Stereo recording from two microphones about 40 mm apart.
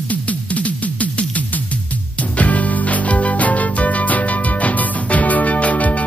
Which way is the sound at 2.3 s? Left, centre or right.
Left.